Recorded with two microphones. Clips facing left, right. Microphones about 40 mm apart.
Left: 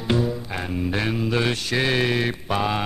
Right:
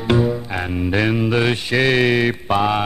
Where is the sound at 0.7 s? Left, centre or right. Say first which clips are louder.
Right 6 dB; right.